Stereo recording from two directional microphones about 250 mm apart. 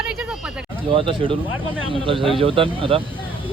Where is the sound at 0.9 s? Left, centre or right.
Right.